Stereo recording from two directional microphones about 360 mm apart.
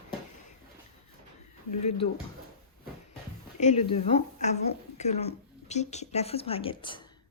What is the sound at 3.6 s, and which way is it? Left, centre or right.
A woman's voice, centre.